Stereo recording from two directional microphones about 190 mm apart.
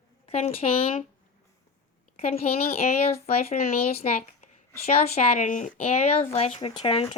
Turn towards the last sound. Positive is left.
turn(degrees=25)  # may be behind; listen again after turning